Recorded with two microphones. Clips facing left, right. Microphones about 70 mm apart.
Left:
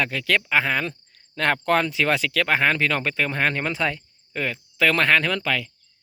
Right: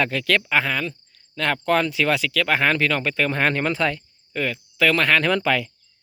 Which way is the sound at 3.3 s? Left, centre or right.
Centre.